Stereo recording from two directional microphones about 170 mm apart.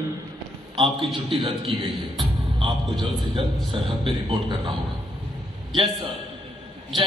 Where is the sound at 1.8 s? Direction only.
25° right (ahead or behind).